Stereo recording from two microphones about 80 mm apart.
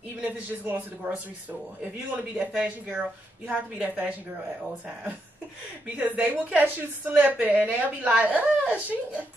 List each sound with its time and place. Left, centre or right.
0.2 s a woman's voice: centre
2.5 s a woman's voice: centre
5.9 s a woman's voice: right